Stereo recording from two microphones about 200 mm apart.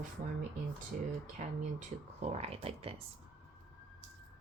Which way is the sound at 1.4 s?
40° right (ahead or behind).